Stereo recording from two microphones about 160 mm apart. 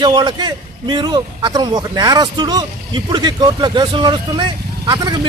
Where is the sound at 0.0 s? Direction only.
25° right (ahead or behind).